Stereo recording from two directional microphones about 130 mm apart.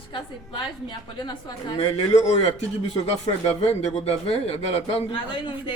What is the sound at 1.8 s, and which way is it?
A man's voice, 65° left (ahead or behind).